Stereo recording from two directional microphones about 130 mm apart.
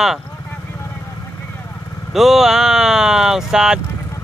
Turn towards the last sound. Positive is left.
turn(degrees=-5)  # may be behind; listen again after turning